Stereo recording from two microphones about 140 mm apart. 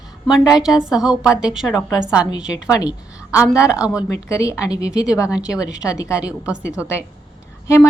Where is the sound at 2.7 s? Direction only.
25° left (ahead or behind).